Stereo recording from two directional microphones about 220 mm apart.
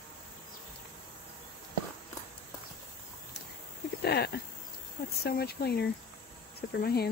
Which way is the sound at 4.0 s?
45° left (ahead or behind).